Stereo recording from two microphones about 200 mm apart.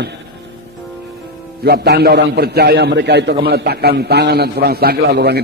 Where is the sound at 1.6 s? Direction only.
50° right (ahead or behind).